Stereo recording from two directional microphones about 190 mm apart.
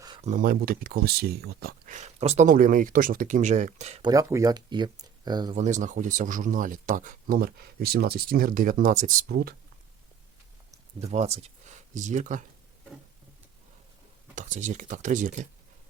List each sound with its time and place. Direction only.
0.2 s speech: 40° right (ahead or behind)
2.0 s speech: 35° right (ahead or behind)
4.0 s speech: 20° right (ahead or behind)
5.5 s speech: 40° right (ahead or behind)
9.3 s speech: 55° right (ahead or behind)
11.1 s speech: 35° right (ahead or behind)
14.3 s speech: 40° right (ahead or behind)